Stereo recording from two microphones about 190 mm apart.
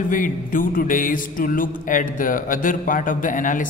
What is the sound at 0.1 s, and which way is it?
Speech, 45° left (ahead or behind).